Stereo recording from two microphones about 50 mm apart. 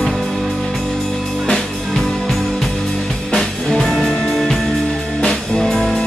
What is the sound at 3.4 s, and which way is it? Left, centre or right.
Music, centre.